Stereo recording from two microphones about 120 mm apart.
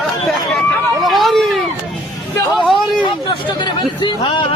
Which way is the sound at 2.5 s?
Centre (ahead or behind).